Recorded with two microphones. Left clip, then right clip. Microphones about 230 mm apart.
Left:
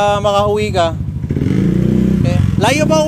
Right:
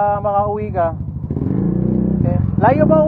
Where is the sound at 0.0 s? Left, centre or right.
Left.